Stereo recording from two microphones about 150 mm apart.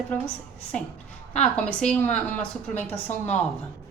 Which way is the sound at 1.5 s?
5° left (ahead or behind).